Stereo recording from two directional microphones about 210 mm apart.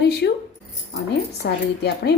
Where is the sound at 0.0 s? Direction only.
50° left (ahead or behind).